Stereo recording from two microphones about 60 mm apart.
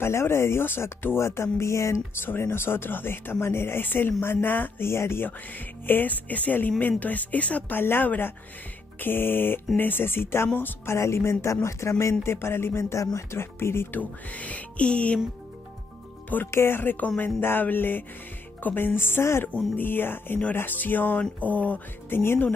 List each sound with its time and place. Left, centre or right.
0.0 s speech: left
2.2 s speech: left
5.9 s speech: left
7.8 s speech: left
13.9 s speech: left
16.4 s speech: left
22.1 s speech: left